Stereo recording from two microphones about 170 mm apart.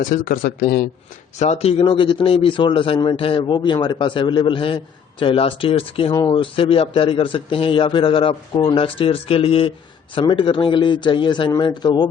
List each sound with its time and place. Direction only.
0.0 s a man's voice: 50° left (ahead or behind)
1.4 s a man's voice: 40° left (ahead or behind)